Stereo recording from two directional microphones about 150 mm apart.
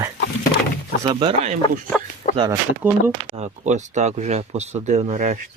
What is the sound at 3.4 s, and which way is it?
Speech, 50° right (ahead or behind).